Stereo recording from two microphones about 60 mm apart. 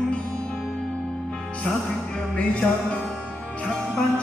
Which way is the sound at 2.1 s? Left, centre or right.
Centre.